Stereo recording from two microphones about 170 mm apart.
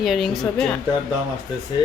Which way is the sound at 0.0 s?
Centre (ahead or behind).